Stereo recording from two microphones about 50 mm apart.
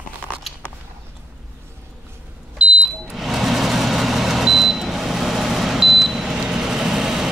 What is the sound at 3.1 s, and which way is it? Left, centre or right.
Vehicle, centre.